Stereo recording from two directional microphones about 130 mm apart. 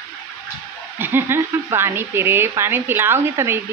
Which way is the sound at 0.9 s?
15° right (ahead or behind).